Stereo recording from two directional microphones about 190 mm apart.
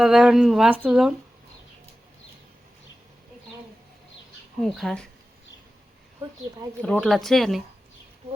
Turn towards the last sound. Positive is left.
turn(degrees=0)  # may be behind; listen again after turning